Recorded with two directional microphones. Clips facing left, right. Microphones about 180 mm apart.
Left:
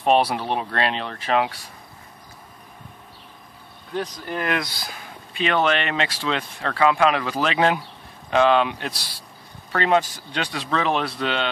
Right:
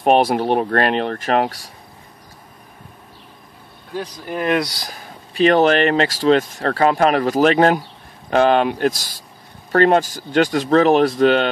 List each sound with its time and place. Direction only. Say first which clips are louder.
0.0 s speech: right 4 dB; 50° right (ahead or behind)
3.9 s speech: right 1 dB; 10° right (ahead or behind)
4.7 s speech: right 2 dB; 40° right (ahead or behind)